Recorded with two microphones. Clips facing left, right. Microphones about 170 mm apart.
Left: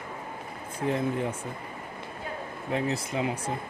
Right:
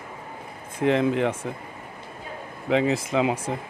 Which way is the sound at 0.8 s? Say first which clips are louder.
Right 7 dB; 90° right.